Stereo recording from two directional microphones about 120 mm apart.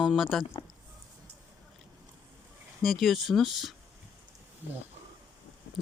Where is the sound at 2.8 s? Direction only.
Centre (ahead or behind).